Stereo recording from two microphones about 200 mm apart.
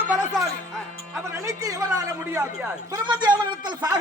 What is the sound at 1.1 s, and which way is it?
A man's voice, 15° right (ahead or behind).